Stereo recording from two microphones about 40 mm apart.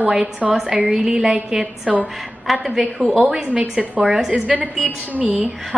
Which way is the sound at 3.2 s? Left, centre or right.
Centre.